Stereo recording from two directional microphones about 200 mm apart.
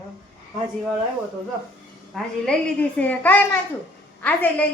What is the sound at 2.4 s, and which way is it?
A woman's voice, 5° left (ahead or behind).